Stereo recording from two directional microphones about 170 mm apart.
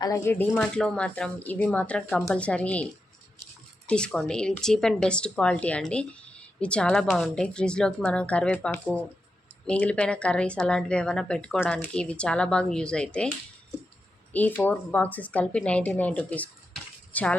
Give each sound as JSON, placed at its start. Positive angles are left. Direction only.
{"t": 0.0, "sound": "speech", "side_deg": 20}
{"t": 0.3, "sound": "speech", "side_deg": 5}
{"t": 3.8, "sound": "a woman's voice", "side_deg": 5}
{"t": 14.3, "sound": "speech", "side_deg": 10}